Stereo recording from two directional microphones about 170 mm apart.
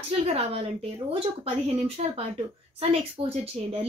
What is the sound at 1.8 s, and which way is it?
A woman's voice, 35° right (ahead or behind).